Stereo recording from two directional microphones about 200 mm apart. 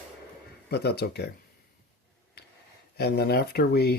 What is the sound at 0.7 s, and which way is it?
Speech, 55° left (ahead or behind).